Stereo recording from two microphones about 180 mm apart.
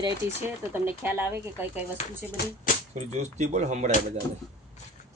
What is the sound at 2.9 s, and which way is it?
Speech, 40° right (ahead or behind).